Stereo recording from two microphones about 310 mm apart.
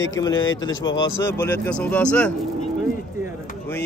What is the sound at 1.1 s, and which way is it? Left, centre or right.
Livestock, centre.